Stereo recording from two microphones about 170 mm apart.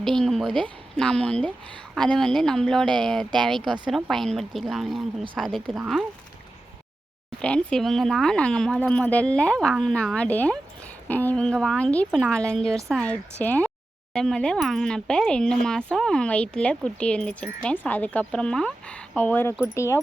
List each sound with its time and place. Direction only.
0.0 s speech: centre (ahead or behind)
7.4 s speech: 5° left (ahead or behind)